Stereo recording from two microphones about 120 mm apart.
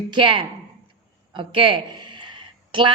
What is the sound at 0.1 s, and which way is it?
A woman's voice, 45° right (ahead or behind).